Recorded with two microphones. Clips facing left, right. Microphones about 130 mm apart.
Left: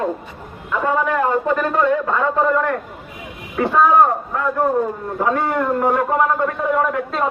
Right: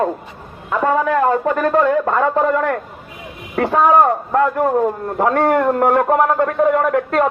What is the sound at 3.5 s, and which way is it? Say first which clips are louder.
A man's voice: right 1 dB; 80° right.